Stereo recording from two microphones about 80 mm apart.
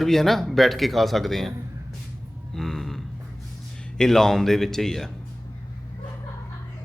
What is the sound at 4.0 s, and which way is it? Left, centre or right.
A man's voice, centre.